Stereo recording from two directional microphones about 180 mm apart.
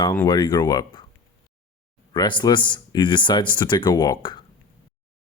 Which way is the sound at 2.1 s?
25° left (ahead or behind).